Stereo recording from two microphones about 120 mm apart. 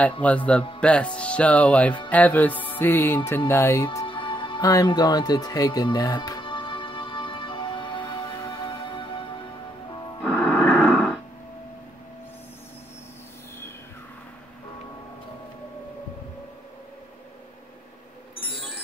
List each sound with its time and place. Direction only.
0.2 s speech: 10° left (ahead or behind)
3.3 s music: 20° left (ahead or behind)
4.0 s music: 45° left (ahead or behind)
10.2 s a sound: 5° left (ahead or behind)